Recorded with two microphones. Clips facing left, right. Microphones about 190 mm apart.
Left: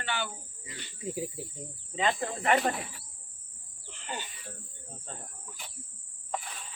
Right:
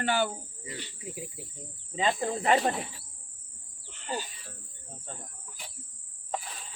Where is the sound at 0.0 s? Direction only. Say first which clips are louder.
Right 8 dB; 45° right (ahead or behind).